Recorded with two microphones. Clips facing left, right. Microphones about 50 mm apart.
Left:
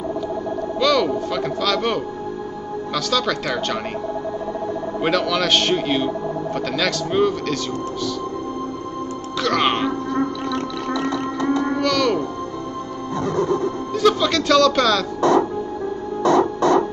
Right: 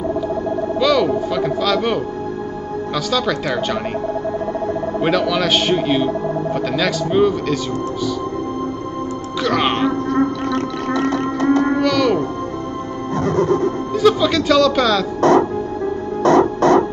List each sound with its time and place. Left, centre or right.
0.7 s a child's voice: centre
3.1 s speech: centre
5.0 s speech: centre
9.4 s speech: centre
10.1 s music: right
11.8 s music: centre
13.2 s music: right
13.9 s speech: centre
15.1 s speech: right
16.2 s music: right